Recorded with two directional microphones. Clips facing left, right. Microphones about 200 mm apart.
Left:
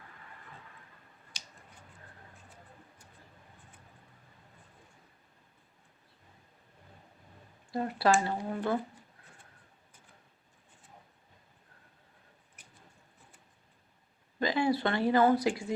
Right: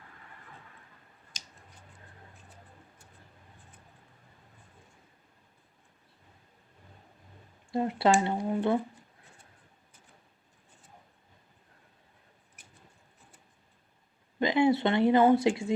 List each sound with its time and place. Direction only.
7.7 s speech: 25° right (ahead or behind)
14.3 s speech: 20° right (ahead or behind)